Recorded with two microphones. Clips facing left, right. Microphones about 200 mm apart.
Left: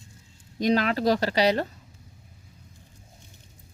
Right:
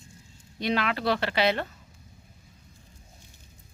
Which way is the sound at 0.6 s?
40° left (ahead or behind).